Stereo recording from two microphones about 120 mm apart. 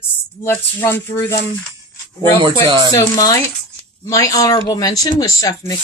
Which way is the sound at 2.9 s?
30° left (ahead or behind).